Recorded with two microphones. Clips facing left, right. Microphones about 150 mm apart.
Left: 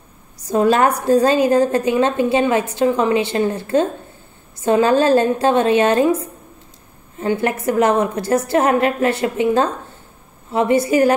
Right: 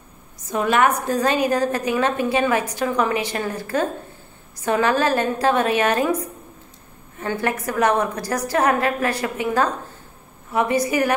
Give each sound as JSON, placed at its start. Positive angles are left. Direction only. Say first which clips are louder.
{"t": 0.5, "sound": "a woman's voice", "louder": "left 4 dB", "side_deg": 35}